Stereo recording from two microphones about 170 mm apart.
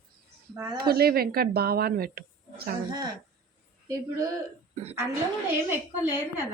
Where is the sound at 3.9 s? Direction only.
20° right (ahead or behind).